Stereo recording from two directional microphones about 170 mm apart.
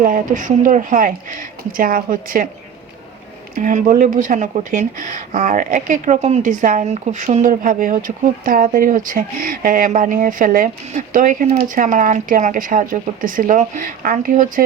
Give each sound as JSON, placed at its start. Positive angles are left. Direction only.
{"t": 0.0, "sound": "speech", "side_deg": -55}
{"t": 3.5, "sound": "speech", "side_deg": -50}